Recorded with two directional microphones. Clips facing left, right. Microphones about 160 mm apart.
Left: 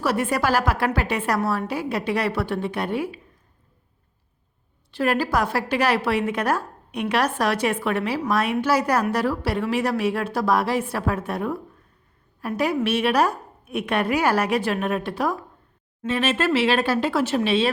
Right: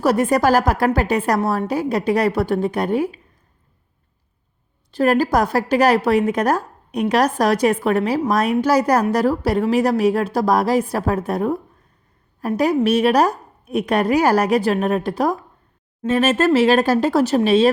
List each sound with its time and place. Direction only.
0.0 s a woman's voice: 40° right (ahead or behind)
4.9 s a woman's voice: 40° right (ahead or behind)